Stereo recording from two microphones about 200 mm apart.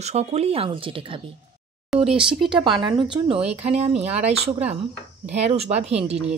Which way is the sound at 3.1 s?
25° right (ahead or behind).